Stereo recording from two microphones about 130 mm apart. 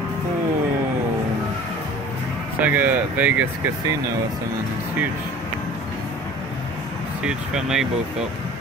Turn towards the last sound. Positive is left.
turn(degrees=-5)  # may be behind; listen again after turning